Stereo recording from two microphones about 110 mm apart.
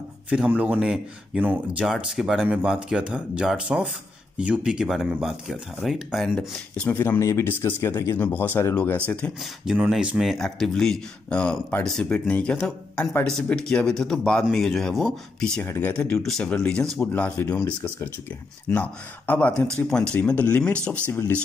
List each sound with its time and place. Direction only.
0.3 s speech: 10° right (ahead or behind); by 6.9 s 5° left (ahead or behind)
6.9 s speech: 20° left (ahead or behind)
9.8 s speech: 5° right (ahead or behind)
15.6 s speech: 20° left (ahead or behind)
18.7 s speech: 15° left (ahead or behind)
21.1 s speech: 20° left (ahead or behind)